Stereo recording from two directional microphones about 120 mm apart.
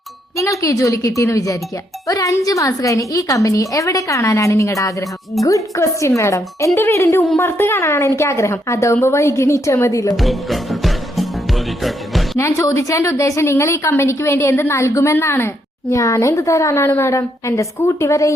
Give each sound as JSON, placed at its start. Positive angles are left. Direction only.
{"t": 0.3, "sound": "a woman's voice", "side_deg": 25}
{"t": 10.2, "sound": "music", "side_deg": 0}
{"t": 12.4, "sound": "a woman's voice", "side_deg": 25}